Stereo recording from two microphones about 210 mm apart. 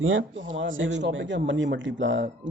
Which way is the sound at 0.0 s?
65° right (ahead or behind).